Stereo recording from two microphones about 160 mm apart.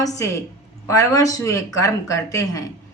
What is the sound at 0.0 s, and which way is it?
A woman's voice, 20° left (ahead or behind).